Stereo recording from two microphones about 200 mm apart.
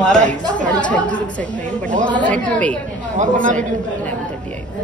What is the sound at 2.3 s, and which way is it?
Speech, 5° left (ahead or behind).